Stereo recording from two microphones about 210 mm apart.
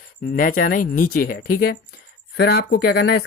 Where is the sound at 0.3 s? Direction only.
40° left (ahead or behind).